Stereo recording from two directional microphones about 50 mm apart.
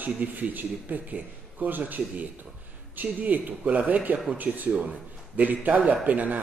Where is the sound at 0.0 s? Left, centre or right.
Right.